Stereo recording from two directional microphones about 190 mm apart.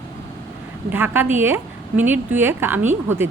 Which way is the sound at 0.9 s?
10° right (ahead or behind).